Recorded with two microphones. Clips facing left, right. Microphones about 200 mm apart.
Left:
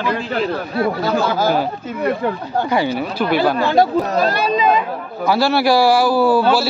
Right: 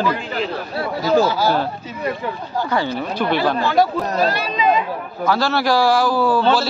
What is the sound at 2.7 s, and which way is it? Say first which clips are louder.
Speech: left 2 dB; 10° left (ahead or behind).